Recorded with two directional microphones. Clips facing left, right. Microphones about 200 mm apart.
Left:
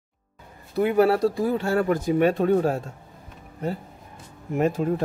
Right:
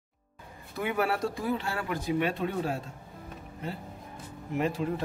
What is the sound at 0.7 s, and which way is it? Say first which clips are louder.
Speech: left 10 dB; 35° left (ahead or behind).